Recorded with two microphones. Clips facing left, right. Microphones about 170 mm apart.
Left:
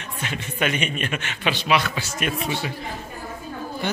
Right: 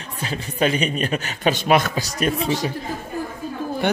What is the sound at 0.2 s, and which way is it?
A man's voice, 35° right (ahead or behind).